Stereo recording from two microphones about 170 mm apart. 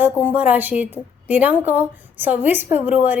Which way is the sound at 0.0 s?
10° right (ahead or behind).